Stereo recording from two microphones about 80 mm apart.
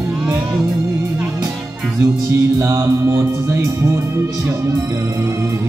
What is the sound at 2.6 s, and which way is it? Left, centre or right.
Music, right.